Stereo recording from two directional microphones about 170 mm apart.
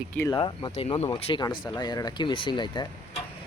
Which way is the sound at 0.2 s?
20° left (ahead or behind).